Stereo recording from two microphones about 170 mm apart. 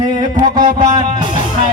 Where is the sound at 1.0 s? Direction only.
50° left (ahead or behind).